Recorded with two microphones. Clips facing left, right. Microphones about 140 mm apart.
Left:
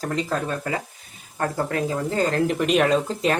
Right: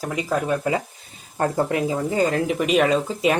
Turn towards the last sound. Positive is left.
turn(degrees=-5)  # may be behind; listen again after turning